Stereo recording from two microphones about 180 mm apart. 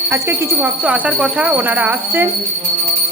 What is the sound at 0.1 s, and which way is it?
Speech, 10° right (ahead or behind).